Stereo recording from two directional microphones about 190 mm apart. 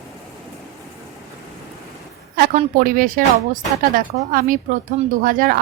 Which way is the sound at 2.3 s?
50° right (ahead or behind).